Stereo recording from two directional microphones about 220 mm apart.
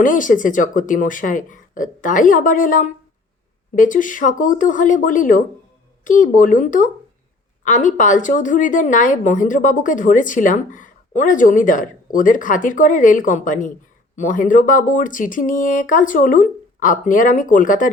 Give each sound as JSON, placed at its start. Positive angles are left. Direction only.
{"t": 0.0, "sound": "a woman's voice", "side_deg": 35}